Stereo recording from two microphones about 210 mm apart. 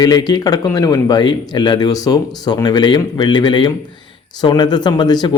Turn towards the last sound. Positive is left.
turn(degrees=20)  # may be behind; listen again after turning